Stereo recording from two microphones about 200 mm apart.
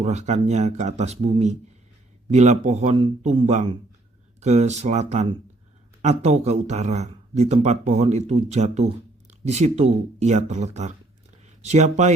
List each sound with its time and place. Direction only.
0.0 s speech: 35° right (ahead or behind)